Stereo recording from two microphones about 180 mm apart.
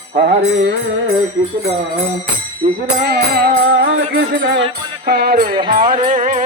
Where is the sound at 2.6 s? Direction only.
50° right (ahead or behind); by 4.2 s 90° right.